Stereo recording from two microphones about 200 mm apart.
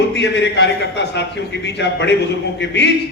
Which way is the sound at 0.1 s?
60° left (ahead or behind).